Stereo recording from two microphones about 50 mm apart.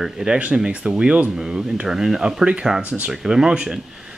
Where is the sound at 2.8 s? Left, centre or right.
Right.